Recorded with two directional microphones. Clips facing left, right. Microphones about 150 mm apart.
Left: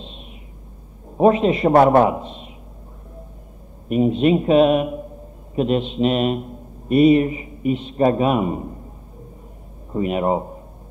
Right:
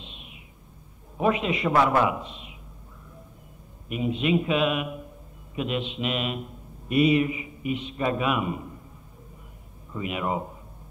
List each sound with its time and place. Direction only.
0.0 s a sound: 35° left (ahead or behind)
1.1 s a man's voice: 35° left (ahead or behind)
3.9 s a man's voice: 40° left (ahead or behind)
9.9 s a man's voice: 40° left (ahead or behind)